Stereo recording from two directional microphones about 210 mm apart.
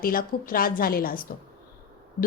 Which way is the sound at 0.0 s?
40° left (ahead or behind).